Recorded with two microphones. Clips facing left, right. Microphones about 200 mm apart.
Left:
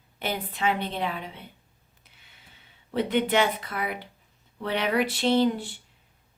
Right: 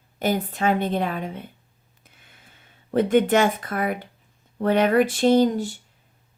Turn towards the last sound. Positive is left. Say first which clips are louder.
# right 5 dB
turn(degrees=-40)  # may be behind; listen again after turning